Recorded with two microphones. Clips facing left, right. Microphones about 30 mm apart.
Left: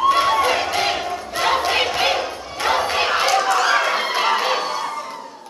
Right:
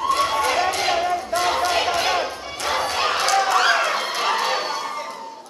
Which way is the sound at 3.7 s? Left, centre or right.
Centre.